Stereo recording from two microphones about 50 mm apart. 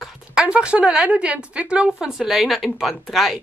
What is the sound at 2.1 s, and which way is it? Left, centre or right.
A woman's voice, centre.